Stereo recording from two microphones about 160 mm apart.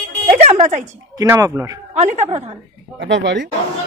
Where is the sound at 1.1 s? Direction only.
20° right (ahead or behind).